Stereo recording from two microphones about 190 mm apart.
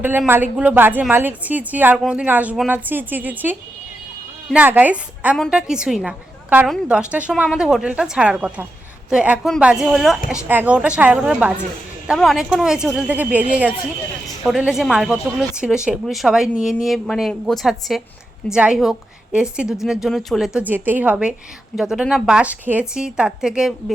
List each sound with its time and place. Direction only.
0.0 s a woman's voice: 10° right (ahead or behind)